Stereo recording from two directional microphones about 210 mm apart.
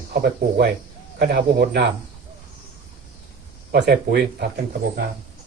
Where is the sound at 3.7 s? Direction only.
50° right (ahead or behind).